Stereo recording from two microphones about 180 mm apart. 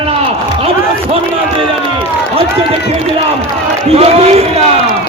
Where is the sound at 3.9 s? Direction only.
35° right (ahead or behind).